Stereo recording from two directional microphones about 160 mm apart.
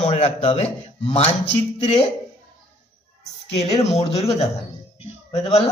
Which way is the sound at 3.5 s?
45° left (ahead or behind).